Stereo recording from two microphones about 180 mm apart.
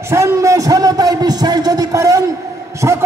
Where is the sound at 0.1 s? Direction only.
15° right (ahead or behind).